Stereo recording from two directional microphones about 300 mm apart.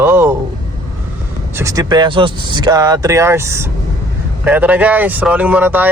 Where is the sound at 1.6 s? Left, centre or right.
Centre.